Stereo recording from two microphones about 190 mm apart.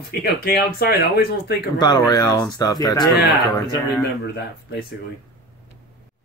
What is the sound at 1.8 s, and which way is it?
Speech, 20° left (ahead or behind).